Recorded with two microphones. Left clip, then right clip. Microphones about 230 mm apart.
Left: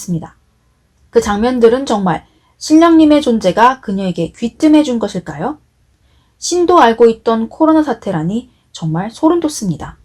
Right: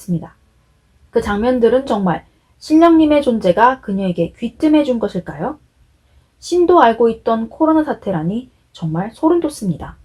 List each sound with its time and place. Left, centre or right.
0.1 s speech: left